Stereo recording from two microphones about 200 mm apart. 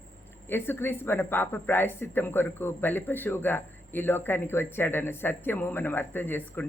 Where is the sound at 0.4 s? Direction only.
10° left (ahead or behind).